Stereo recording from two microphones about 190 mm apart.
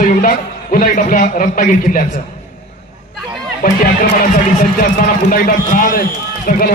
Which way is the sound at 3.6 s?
50° left (ahead or behind).